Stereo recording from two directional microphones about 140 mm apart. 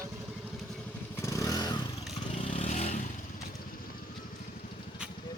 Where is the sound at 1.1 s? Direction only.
20° left (ahead or behind).